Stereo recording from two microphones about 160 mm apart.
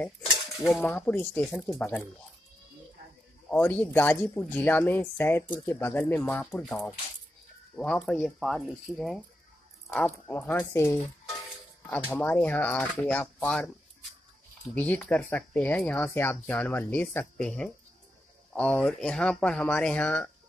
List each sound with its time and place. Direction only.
0.6 s speech: centre (ahead or behind)
3.4 s speech: 10° left (ahead or behind)
12.1 s speech: 10° left (ahead or behind)
14.7 s speech: 10° left (ahead or behind)